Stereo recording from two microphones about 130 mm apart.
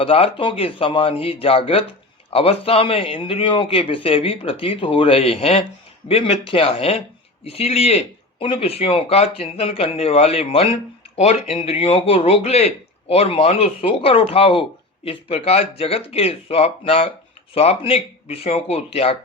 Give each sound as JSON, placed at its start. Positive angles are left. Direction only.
{"t": 0.0, "sound": "a man's voice", "side_deg": 45}